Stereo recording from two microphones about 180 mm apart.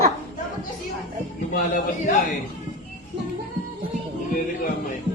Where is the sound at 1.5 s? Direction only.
45° left (ahead or behind).